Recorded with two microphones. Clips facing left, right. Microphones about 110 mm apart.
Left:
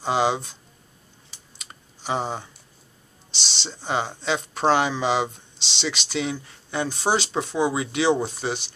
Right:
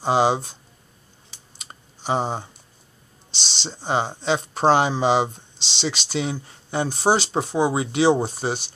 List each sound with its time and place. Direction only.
0.0 s speech: 35° right (ahead or behind)
1.6 s typing: 35° right (ahead or behind)
3.6 s speech: 30° right (ahead or behind)